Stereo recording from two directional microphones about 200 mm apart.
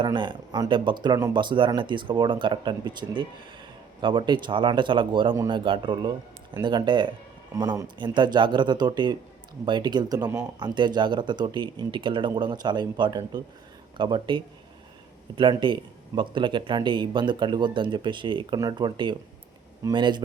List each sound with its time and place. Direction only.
0.0 s speech: 25° right (ahead or behind)